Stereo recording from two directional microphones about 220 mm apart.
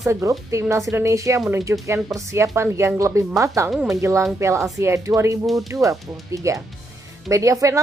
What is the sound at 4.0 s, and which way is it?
Speech, 15° right (ahead or behind).